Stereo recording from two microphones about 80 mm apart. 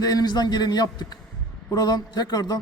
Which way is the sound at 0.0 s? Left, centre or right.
Left.